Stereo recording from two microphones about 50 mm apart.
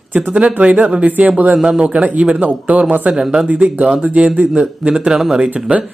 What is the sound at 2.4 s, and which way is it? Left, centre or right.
Speech, right.